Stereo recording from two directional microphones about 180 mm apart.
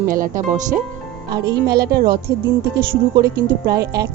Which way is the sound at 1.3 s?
60° right (ahead or behind).